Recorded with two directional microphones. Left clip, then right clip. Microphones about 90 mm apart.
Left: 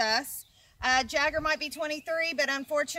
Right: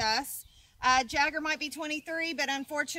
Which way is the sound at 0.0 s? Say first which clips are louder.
Left 2 dB; 20° left (ahead or behind).